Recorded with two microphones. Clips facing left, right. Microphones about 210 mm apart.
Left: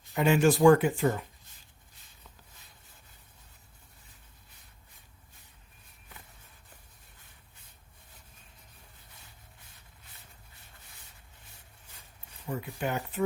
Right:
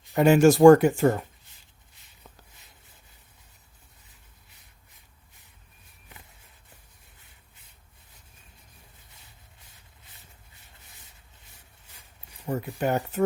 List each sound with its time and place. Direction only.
0.1 s speech: 45° right (ahead or behind)
12.5 s speech: 40° right (ahead or behind)